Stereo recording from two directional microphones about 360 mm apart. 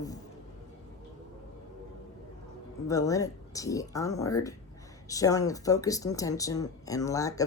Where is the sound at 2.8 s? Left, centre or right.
Centre.